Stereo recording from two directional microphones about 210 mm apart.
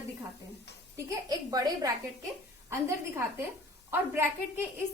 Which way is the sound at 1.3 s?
20° right (ahead or behind).